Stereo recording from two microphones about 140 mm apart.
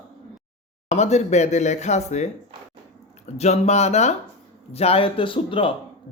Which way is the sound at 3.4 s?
50° left (ahead or behind).